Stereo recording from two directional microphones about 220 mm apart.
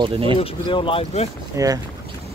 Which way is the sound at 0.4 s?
25° left (ahead or behind).